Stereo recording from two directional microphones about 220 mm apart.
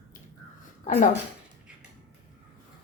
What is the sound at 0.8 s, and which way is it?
Speech, 35° left (ahead or behind).